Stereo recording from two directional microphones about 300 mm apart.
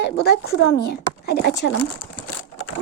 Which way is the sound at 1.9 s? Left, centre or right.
Left.